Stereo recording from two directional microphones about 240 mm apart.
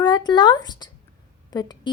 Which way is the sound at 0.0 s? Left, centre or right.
Centre.